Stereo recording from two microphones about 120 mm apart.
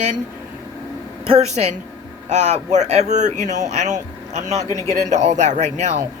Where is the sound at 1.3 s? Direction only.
65° right (ahead or behind); by 3.6 s 85° right.